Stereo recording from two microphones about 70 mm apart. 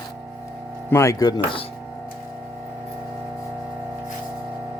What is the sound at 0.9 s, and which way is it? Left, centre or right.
Speech, left.